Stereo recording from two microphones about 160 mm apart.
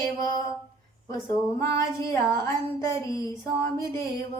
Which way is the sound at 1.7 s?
20° left (ahead or behind).